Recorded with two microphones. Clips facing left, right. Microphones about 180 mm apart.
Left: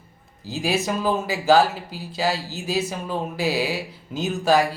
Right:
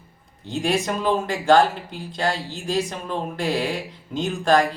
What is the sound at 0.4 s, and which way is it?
Speech, 5° left (ahead or behind).